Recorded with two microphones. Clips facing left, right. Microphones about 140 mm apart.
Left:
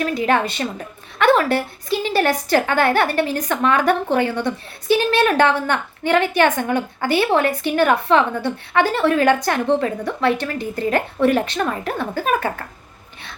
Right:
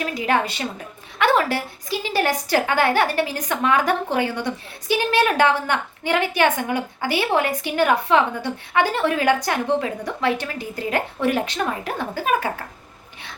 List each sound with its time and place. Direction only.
0.0 s a woman's voice: 15° right (ahead or behind)
1.9 s a woman's voice: 15° right (ahead or behind)